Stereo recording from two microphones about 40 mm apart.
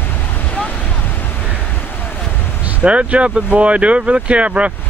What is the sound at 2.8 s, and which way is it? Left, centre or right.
Speech, right.